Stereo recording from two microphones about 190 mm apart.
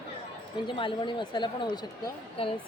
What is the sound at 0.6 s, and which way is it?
A woman's voice, 25° left (ahead or behind).